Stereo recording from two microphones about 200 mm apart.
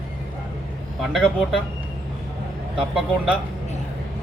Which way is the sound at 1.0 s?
Centre (ahead or behind).